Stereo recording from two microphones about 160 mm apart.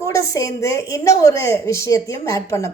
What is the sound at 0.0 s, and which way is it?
A woman's voice, 20° left (ahead or behind).